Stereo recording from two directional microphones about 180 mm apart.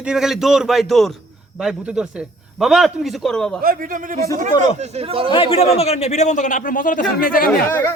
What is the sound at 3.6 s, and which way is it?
Speech, 50° right (ahead or behind).